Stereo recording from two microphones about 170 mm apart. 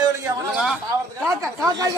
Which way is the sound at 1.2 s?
15° right (ahead or behind).